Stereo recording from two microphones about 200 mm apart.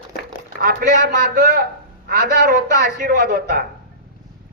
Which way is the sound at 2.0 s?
50° right (ahead or behind).